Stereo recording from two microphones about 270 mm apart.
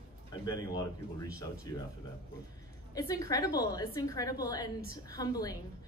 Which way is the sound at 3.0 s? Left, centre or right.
Centre.